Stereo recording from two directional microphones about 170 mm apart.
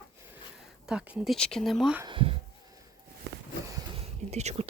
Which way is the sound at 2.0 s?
30° right (ahead or behind).